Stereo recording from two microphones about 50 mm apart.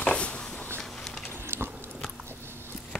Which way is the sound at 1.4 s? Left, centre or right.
Right.